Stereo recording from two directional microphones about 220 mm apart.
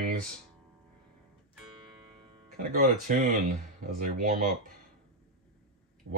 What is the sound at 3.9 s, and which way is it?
Speech, 40° right (ahead or behind).